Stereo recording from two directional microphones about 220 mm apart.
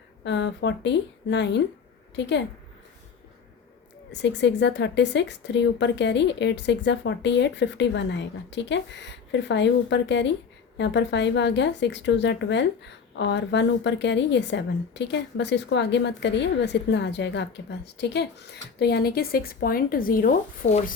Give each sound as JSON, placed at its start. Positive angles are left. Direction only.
{"t": 0.3, "sound": "a woman's voice", "side_deg": 55}
{"t": 4.1, "sound": "a woman's voice", "side_deg": 50}